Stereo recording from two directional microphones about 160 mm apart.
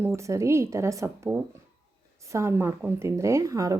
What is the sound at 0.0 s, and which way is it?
A woman's voice, 15° right (ahead or behind).